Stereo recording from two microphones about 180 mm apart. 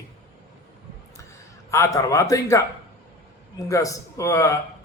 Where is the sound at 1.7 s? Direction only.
15° left (ahead or behind).